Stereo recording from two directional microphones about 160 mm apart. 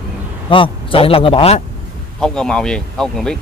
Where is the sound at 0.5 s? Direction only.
35° left (ahead or behind).